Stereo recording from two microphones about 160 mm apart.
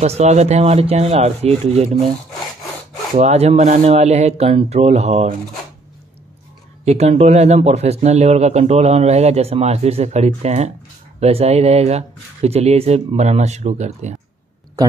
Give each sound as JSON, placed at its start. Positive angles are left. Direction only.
{"t": 0.0, "sound": "speech", "side_deg": -45}
{"t": 3.2, "sound": "speech", "side_deg": -40}
{"t": 6.8, "sound": "speech", "side_deg": -40}